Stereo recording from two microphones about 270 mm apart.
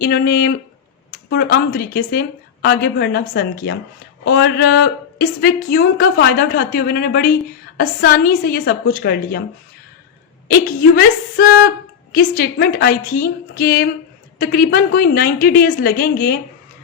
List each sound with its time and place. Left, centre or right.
0.0 s a woman's voice: left
10.5 s a woman's voice: left